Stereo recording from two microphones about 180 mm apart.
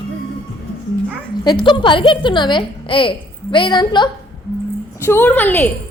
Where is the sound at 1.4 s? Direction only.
25° left (ahead or behind).